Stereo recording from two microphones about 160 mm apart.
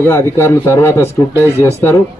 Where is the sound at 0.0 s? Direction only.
15° left (ahead or behind).